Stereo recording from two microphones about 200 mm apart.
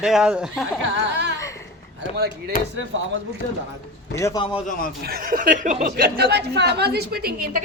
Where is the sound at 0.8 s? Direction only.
60° right (ahead or behind).